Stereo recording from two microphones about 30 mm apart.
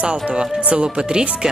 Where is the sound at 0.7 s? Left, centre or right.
Right.